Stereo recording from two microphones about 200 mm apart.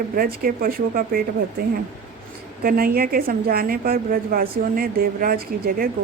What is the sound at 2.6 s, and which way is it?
A woman's voice, 45° right (ahead or behind).